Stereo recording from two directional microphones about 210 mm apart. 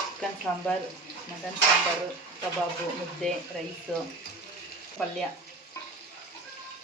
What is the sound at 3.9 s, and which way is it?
Speech, centre (ahead or behind).